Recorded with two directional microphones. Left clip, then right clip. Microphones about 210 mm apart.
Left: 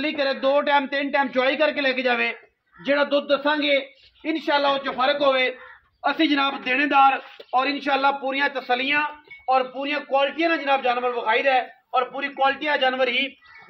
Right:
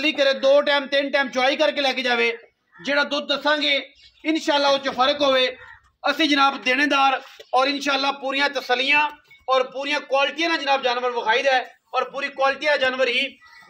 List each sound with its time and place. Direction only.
0.0 s a man's voice: 40° right (ahead or behind); by 13.3 s 20° right (ahead or behind)